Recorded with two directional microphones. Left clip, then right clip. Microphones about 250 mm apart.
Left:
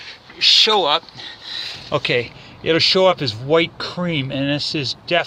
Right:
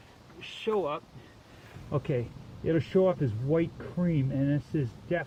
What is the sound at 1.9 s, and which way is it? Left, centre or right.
Speech, centre.